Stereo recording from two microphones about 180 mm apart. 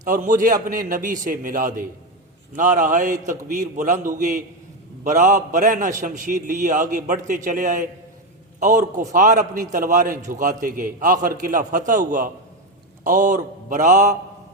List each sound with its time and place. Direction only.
0.0 s a man's voice: 45° right (ahead or behind)